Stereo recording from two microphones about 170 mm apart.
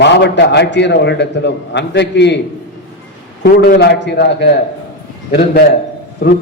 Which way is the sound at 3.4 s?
75° left (ahead or behind).